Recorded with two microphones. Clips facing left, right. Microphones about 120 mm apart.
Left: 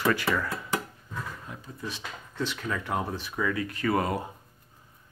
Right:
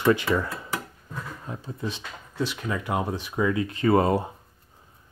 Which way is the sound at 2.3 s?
10° right (ahead or behind).